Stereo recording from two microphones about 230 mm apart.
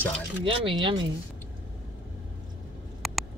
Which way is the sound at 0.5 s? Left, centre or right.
Right.